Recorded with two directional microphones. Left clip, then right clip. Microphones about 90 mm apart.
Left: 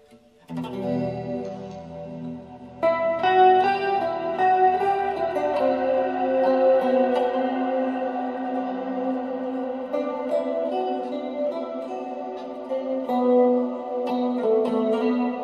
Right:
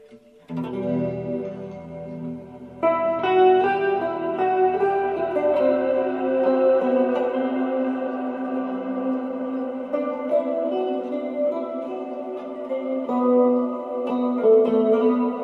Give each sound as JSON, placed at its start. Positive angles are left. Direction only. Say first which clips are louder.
{"t": 0.7, "sound": "music", "louder": "right 1 dB", "side_deg": 20}
{"t": 2.8, "sound": "music", "louder": "even", "side_deg": 15}
{"t": 9.9, "sound": "music", "louder": "right 3 dB", "side_deg": 20}
{"t": 12.8, "sound": "music", "louder": "even", "side_deg": 20}